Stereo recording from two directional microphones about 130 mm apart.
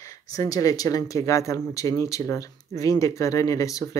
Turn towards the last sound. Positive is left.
turn(degrees=25)  # may be behind; listen again after turning